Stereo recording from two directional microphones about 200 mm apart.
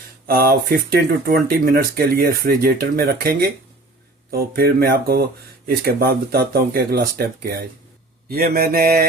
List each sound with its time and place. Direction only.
0.3 s speech: 50° right (ahead or behind)